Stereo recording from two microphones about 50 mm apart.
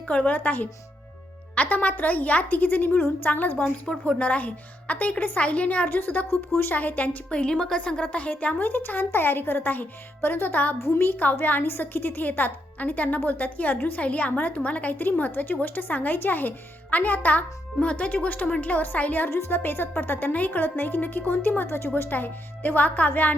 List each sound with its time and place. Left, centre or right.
0.1 s speech: left
3.9 s a woman's voice: centre
4.2 s a woman's voice: left
7.3 s a woman's voice: left
19.5 s speech: left